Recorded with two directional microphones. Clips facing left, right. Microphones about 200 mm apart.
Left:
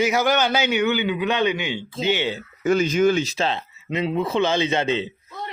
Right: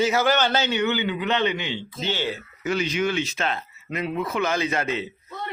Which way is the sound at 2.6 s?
45° left (ahead or behind).